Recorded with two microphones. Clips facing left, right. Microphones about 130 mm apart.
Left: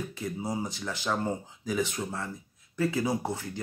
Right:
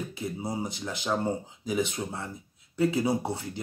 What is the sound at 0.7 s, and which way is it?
Speech, 15° right (ahead or behind).